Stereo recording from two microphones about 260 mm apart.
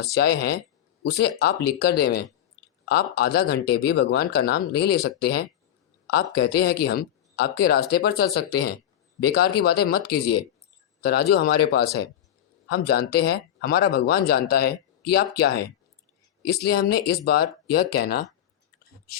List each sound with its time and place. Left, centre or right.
0.1 s speech: left
9.6 s speech: left